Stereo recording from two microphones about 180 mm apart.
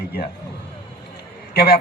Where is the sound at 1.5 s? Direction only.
60° left (ahead or behind).